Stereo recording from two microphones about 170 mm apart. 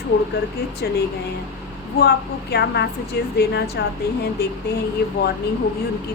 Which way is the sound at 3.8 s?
90° left.